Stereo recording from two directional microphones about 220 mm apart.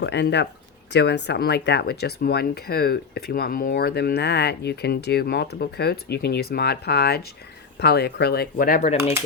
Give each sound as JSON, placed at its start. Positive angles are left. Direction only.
{"t": 0.0, "sound": "speech", "side_deg": 50}